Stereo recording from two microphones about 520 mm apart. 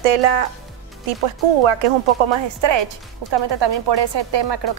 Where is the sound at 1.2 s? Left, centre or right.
Right.